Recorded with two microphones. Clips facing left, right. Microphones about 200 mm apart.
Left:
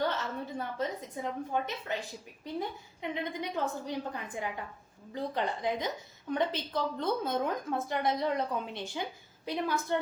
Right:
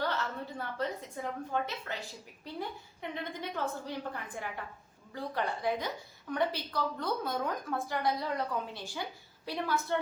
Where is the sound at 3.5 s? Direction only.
15° left (ahead or behind).